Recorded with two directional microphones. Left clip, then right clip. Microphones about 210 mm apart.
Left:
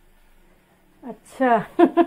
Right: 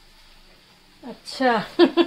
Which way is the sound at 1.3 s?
25° left (ahead or behind).